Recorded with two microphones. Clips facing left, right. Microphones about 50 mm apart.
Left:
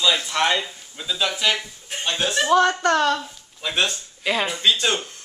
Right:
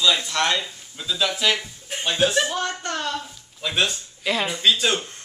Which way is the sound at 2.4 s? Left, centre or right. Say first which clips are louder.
Left 9 dB; left.